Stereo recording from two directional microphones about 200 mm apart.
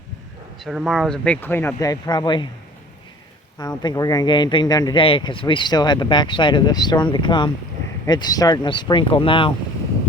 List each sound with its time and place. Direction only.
0.6 s speech: centre (ahead or behind); by 2.5 s 25° left (ahead or behind)
3.6 s speech: 20° left (ahead or behind)